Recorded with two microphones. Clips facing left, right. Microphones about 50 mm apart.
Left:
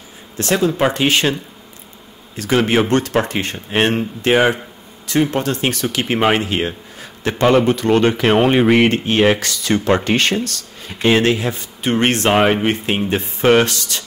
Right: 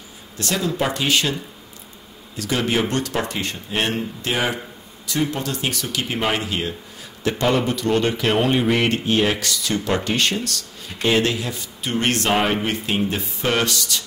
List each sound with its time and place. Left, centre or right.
0.4 s speech: left
2.3 s speech: left